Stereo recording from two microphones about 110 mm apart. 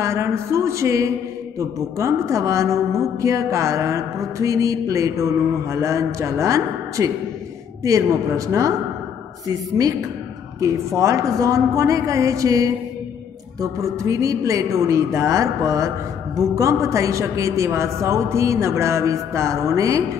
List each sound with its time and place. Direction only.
0.0 s a woman's voice: 25° right (ahead or behind)